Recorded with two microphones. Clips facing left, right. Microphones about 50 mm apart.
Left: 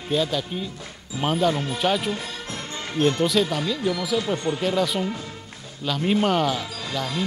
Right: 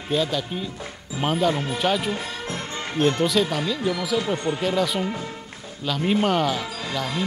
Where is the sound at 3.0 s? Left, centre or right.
Centre.